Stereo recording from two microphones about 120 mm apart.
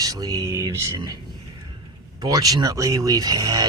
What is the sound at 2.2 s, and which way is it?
Speech, 30° right (ahead or behind).